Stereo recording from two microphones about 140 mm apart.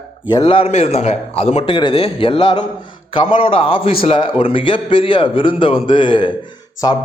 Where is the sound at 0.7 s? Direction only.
45° left (ahead or behind); by 7.0 s 30° left (ahead or behind).